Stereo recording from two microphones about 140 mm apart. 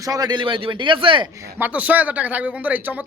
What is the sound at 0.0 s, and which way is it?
A man's voice, 25° right (ahead or behind).